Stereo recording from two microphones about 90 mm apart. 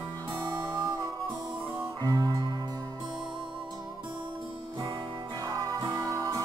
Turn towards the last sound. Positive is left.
turn(degrees=-40)  # may be behind; listen again after turning